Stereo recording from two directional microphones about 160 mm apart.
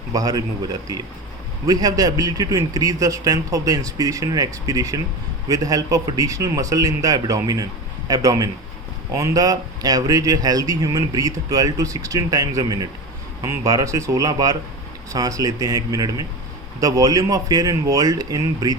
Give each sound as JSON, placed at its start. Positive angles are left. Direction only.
{"t": 0.1, "sound": "speech", "side_deg": -25}
{"t": 1.6, "sound": "speech", "side_deg": -20}